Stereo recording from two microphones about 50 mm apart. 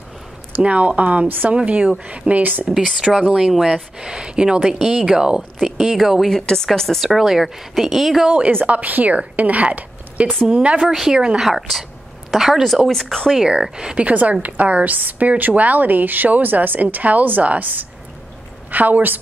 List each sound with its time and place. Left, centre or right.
0.6 s speech: right
3.0 s speech: centre
6.3 s a woman's voice: centre
8.6 s a woman's voice: right
10.2 s speech: centre
10.5 s speech: right
10.9 s speech: centre
12.9 s speech: centre
13.4 s speech: centre
14.0 s a woman's voice: right